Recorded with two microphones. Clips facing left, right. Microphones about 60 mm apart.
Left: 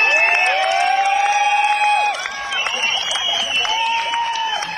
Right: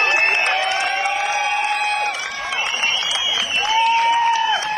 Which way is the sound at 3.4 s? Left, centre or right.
Right.